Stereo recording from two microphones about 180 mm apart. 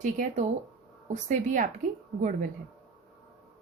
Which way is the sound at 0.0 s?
45° right (ahead or behind).